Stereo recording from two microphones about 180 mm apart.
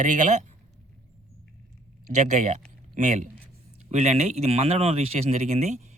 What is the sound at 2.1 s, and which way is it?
Speech, 40° right (ahead or behind).